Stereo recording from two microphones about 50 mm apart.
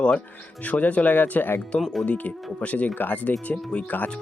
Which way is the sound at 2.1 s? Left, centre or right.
Left.